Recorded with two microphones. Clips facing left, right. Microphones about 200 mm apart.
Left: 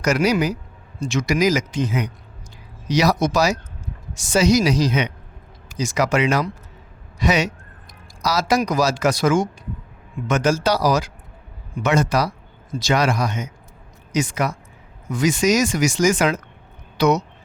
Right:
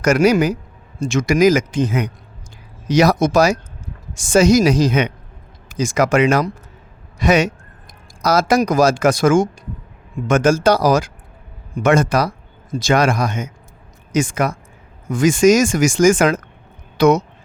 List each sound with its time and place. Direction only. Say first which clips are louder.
0.0 s speech: right 5 dB; 50° right (ahead or behind)